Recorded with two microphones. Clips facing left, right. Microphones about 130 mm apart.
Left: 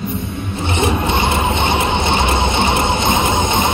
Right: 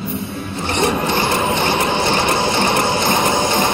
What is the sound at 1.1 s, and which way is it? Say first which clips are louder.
Ratchet: left 1 dB; 25° left (ahead or behind).